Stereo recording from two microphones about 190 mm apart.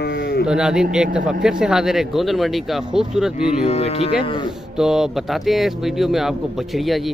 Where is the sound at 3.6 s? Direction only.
35° left (ahead or behind).